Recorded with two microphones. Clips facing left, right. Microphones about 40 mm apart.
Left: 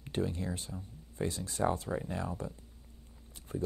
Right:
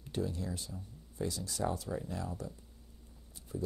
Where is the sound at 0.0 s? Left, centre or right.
Left.